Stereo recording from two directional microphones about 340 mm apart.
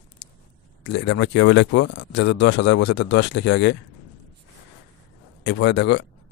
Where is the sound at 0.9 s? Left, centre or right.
Left.